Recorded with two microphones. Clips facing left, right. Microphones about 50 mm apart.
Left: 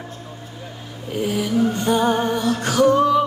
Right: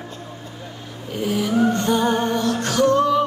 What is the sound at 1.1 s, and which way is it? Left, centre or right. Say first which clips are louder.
Snoring: even; centre.